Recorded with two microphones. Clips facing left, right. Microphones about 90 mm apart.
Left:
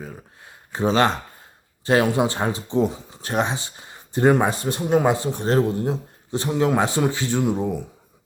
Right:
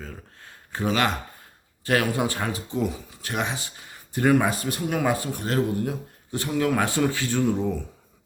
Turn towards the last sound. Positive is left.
turn(degrees=15)  # may be behind; listen again after turning